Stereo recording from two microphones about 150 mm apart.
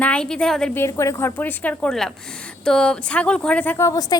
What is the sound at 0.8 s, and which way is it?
A woman's voice, 20° left (ahead or behind).